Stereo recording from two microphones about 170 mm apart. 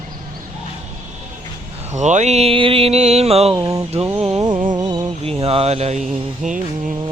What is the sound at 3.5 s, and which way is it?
Mantra, 20° right (ahead or behind).